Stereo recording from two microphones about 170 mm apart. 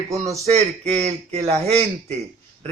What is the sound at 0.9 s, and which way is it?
Speech, 40° right (ahead or behind).